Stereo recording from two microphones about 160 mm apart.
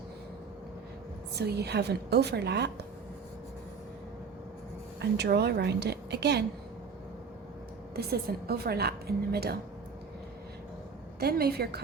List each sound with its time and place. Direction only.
1.4 s a woman's voice: 90° right
4.9 s a woman's voice: 90° right
7.9 s a woman's voice: 75° right (ahead or behind)
11.2 s a woman's voice: 75° right (ahead or behind)